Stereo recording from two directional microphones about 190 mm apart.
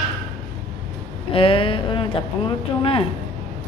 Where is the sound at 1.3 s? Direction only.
30° left (ahead or behind).